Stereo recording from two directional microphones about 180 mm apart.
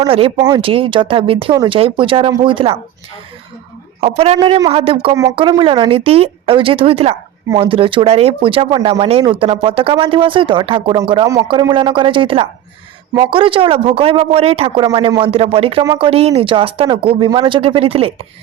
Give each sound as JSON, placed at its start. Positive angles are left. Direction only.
{"t": 0.0, "sound": "speech", "side_deg": -30}
{"t": 4.0, "sound": "speech", "side_deg": -35}
{"t": 15.8, "sound": "speech", "side_deg": -20}
{"t": 16.0, "sound": "speech", "side_deg": -35}